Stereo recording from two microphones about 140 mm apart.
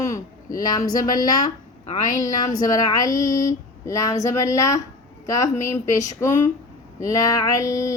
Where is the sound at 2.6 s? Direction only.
25° left (ahead or behind).